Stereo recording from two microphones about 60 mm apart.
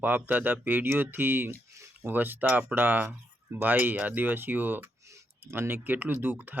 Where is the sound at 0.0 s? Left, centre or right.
Right.